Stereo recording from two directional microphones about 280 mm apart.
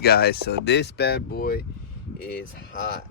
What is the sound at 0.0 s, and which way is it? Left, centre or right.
Speech, left.